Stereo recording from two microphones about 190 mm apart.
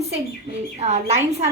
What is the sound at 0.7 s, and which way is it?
Speech, 35° right (ahead or behind).